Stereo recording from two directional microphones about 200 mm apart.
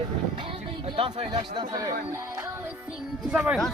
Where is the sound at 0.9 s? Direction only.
25° right (ahead or behind).